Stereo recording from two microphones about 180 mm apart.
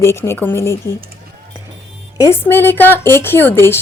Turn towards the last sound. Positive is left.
turn(degrees=15)  # may be behind; listen again after turning